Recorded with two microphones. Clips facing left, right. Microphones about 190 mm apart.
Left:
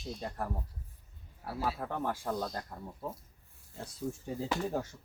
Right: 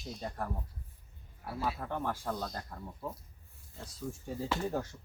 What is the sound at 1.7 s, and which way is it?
Speech, 15° left (ahead or behind).